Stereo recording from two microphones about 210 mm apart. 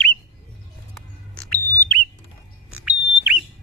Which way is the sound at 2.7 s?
10° right (ahead or behind).